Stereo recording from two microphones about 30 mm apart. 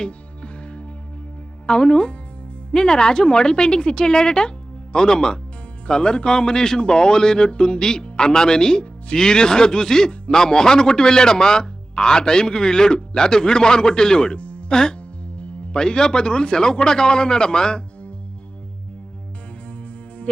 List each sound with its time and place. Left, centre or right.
0.0 s music: left
1.6 s speech: left
14.3 s music: left
14.7 s speech: left